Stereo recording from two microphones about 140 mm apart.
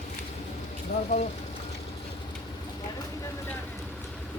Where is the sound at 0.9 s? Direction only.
90° left.